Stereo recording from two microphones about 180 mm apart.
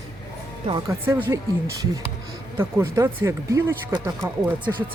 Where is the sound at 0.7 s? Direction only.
15° right (ahead or behind).